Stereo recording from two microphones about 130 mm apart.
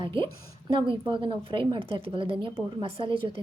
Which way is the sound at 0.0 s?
40° right (ahead or behind).